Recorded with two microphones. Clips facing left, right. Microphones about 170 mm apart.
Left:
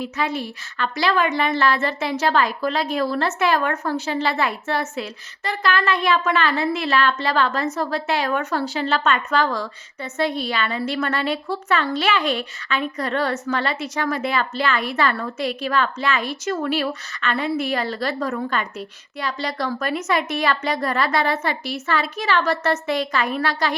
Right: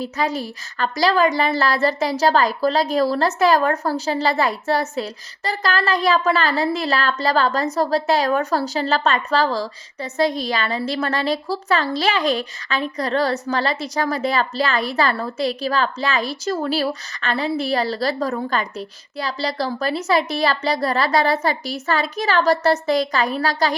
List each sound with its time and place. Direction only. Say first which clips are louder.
0.0 s a woman's voice: right 2 dB; 40° right (ahead or behind)